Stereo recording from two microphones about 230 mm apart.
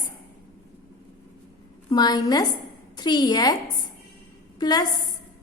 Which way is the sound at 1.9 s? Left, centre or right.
Centre.